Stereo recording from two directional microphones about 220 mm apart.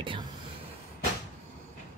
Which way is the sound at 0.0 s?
20° right (ahead or behind).